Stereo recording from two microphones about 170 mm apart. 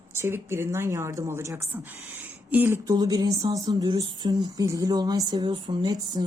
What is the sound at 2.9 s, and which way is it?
Speech, 25° right (ahead or behind).